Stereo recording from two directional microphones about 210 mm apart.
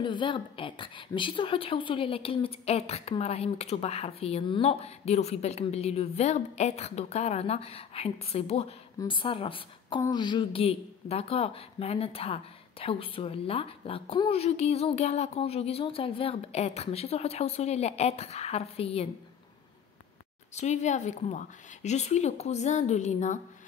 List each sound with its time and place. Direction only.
0.0 s a woman's voice: 25° left (ahead or behind)
20.5 s a woman's voice: 35° left (ahead or behind)